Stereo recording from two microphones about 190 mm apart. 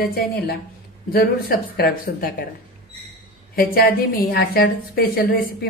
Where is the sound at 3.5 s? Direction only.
50° left (ahead or behind).